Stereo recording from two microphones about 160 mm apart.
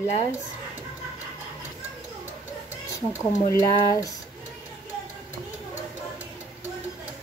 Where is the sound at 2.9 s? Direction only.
20° left (ahead or behind).